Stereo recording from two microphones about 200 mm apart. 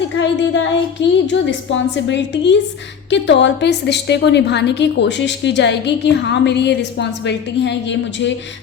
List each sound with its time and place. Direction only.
0.0 s music: 65° left (ahead or behind)
1.3 s a woman's voice: 65° left (ahead or behind)